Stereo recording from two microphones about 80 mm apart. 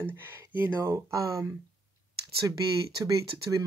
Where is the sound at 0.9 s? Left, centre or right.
Right.